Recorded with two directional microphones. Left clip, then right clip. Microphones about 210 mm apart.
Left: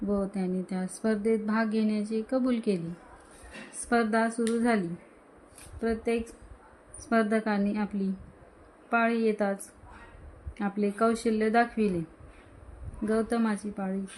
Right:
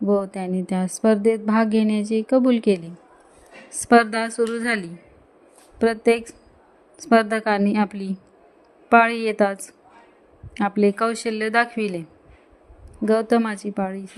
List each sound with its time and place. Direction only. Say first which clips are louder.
0.1 s a woman's voice: right 9 dB; 35° right (ahead or behind)
3.8 s a woman's voice: right 9 dB; 40° right (ahead or behind)
5.8 s a woman's voice: right 11 dB; 40° right (ahead or behind)
13.1 s a woman's voice: right 9 dB; 35° right (ahead or behind)